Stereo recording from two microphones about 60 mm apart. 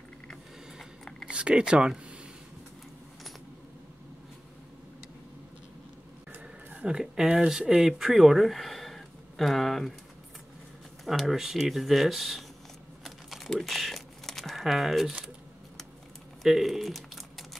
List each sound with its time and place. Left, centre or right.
1.2 s speech: centre
6.4 s speech: centre
11.1 s speech: centre
13.0 s typing: centre
16.4 s crumpling: centre